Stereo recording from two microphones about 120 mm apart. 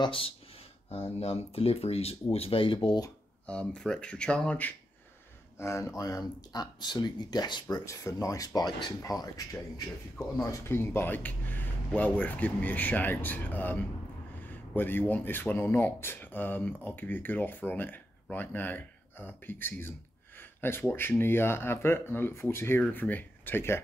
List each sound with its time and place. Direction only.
0.0 s speech: 50° left (ahead or behind)
3.4 s speech: 10° left (ahead or behind)
5.6 s speech: 25° left (ahead or behind)
7.6 s speech: 25° left (ahead or behind)
10.4 s speech: 25° left (ahead or behind)